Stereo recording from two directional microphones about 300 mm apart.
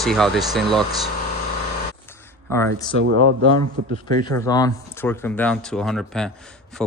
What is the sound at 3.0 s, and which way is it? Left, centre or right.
Speech, right.